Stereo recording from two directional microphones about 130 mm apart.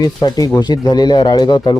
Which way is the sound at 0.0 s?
30° left (ahead or behind).